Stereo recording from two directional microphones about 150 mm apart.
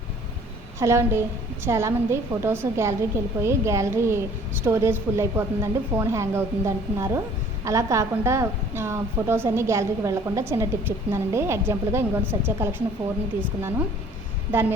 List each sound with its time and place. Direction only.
0.8 s a woman's voice: 15° right (ahead or behind)